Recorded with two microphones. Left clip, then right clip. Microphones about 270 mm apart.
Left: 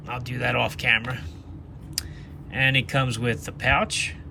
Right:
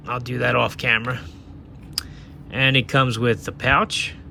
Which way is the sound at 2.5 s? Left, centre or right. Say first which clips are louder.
Right 4 dB; centre.